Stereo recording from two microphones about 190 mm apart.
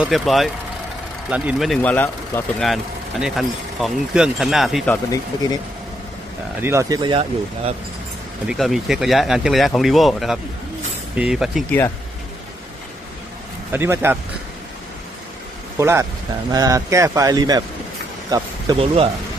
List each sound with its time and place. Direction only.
0.0 s speech: centre (ahead or behind)
4.9 s speech: 20° left (ahead or behind)
6.6 s speech: 15° right (ahead or behind)
8.4 s speech: centre (ahead or behind)
13.7 s speech: 10° right (ahead or behind)
15.8 s speech: 15° right (ahead or behind)
18.8 s speech: 30° right (ahead or behind)